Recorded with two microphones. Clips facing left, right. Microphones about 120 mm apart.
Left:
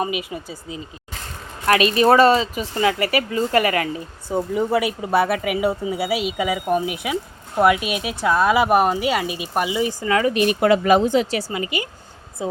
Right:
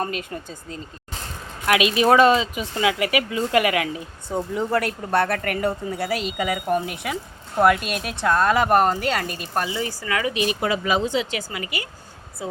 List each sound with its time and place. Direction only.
0.0 s speech: 5° left (ahead or behind)
1.6 s speech: 5° right (ahead or behind); by 10.2 s 20° left (ahead or behind)
10.2 s speech: 45° left (ahead or behind)
11.3 s a woman's voice: 30° left (ahead or behind)